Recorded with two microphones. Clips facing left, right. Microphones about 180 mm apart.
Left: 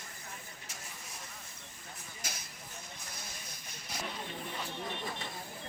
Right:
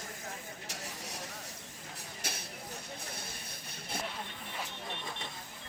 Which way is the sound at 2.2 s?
60° right (ahead or behind).